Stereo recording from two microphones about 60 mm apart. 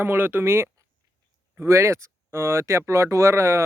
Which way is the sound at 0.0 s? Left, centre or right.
Right.